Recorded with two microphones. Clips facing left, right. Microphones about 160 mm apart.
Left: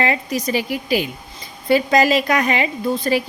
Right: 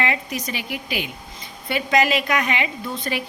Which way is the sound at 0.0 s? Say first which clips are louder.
Left 5 dB; 35° left (ahead or behind).